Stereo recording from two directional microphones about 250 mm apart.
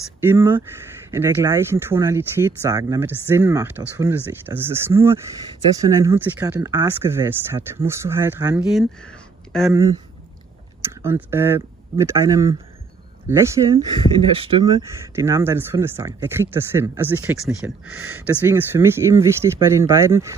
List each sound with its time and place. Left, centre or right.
0.2 s speech: centre
9.7 s speech: centre
11.0 s speech: centre
15.1 s speech: centre